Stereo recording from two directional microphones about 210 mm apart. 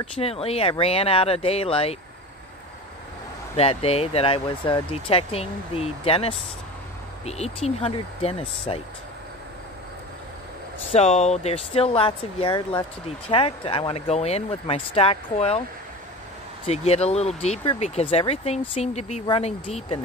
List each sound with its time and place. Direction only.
0.0 s speech: 30° left (ahead or behind)
3.5 s speech: 30° left (ahead or behind)
10.9 s speech: 30° left (ahead or behind)
16.6 s speech: 30° left (ahead or behind)